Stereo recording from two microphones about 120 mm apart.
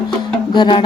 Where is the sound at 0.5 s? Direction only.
40° left (ahead or behind).